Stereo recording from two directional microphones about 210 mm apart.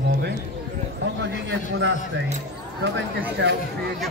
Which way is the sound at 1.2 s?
60° right (ahead or behind).